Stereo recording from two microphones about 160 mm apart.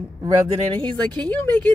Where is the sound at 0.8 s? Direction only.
25° right (ahead or behind).